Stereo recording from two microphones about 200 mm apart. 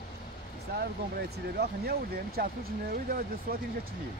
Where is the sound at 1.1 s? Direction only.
50° right (ahead or behind).